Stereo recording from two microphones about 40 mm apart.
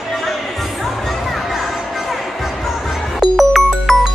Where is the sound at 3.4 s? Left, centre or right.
Centre.